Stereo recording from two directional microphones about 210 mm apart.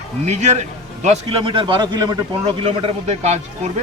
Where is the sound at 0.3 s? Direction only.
30° right (ahead or behind).